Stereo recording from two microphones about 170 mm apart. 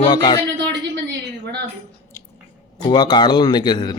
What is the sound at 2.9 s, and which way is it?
A man's voice, 25° left (ahead or behind).